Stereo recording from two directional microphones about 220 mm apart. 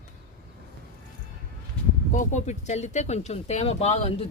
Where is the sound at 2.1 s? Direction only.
35° left (ahead or behind).